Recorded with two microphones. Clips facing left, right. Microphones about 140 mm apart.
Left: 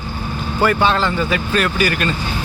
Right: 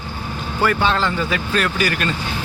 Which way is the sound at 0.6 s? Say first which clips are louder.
Left 3 dB; 20° left (ahead or behind).